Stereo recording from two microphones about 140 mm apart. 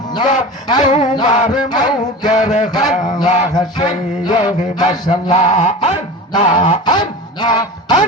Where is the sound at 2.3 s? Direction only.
60° left (ahead or behind).